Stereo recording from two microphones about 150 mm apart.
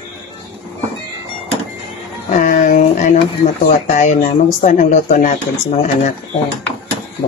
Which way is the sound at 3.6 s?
55° left (ahead or behind).